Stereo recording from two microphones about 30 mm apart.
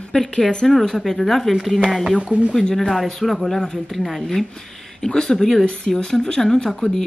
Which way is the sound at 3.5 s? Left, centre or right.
Left.